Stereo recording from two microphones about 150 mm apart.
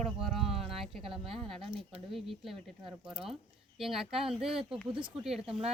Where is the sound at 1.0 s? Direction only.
35° right (ahead or behind).